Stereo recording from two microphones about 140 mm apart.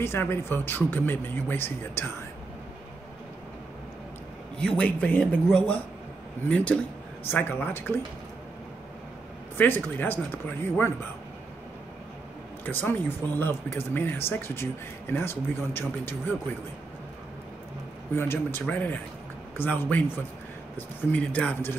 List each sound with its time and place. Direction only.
0.0 s speech: 15° left (ahead or behind)
4.6 s speech: 5° left (ahead or behind)
9.6 s speech: 15° left (ahead or behind)
12.6 s speech: 15° left (ahead or behind)
18.1 s speech: 15° left (ahead or behind)
21.1 s speech: 10° left (ahead or behind)